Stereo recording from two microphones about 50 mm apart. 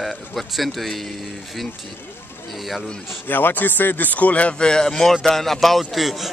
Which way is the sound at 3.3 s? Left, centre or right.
Left.